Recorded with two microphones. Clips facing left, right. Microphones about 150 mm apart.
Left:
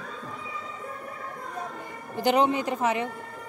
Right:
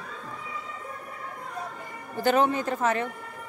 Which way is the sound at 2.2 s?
15° left (ahead or behind).